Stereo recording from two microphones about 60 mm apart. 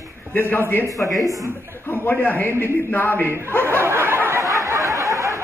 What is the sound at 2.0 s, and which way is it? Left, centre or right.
A man's voice, left.